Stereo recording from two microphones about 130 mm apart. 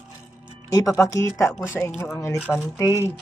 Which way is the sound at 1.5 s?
5° right (ahead or behind).